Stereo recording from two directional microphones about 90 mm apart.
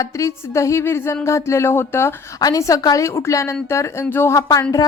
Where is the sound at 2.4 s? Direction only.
40° left (ahead or behind).